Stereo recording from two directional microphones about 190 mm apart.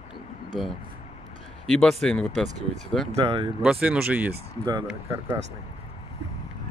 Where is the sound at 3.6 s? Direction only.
5° right (ahead or behind).